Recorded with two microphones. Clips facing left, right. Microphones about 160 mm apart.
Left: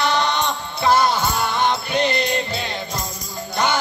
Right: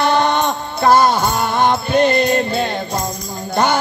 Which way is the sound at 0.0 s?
50° right (ahead or behind).